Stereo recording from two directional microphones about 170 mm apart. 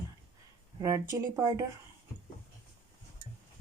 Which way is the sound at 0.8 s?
20° right (ahead or behind).